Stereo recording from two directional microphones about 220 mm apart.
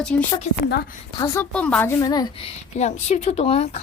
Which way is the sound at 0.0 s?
5° left (ahead or behind).